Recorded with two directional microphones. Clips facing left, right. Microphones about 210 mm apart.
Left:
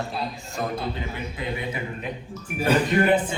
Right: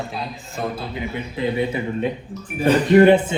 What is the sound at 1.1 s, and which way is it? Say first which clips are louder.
Speech: right 8 dB; 25° right (ahead or behind).